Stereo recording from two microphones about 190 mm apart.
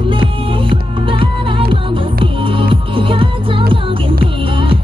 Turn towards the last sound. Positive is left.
turn(degrees=-25)  # may be behind; listen again after turning